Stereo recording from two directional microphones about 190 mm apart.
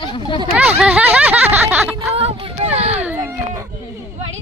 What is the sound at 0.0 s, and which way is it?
Speech, 25° left (ahead or behind).